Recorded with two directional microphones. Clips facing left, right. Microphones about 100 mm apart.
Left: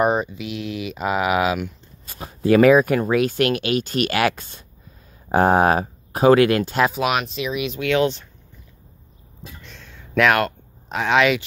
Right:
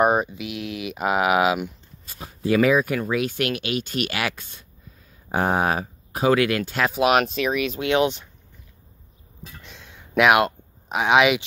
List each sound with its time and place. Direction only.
0.0 s speech: 10° right (ahead or behind)
2.0 s speech: 55° left (ahead or behind); by 6.6 s 40° left (ahead or behind)
6.6 s speech: 25° left (ahead or behind)
7.1 s speech: 45° right (ahead or behind)
7.8 s speech: 25° right (ahead or behind)
9.6 s a sound: 10° right (ahead or behind)